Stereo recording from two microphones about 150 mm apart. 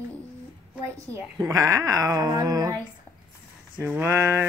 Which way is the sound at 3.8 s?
15° right (ahead or behind).